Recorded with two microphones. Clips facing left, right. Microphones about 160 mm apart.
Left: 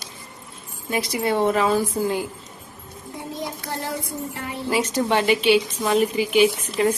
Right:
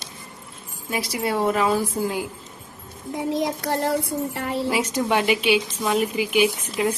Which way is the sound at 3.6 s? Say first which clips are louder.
Right 6 dB; 65° right (ahead or behind).